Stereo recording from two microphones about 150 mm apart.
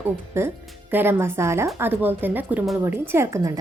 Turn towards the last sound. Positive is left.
turn(degrees=-20)  # may be behind; listen again after turning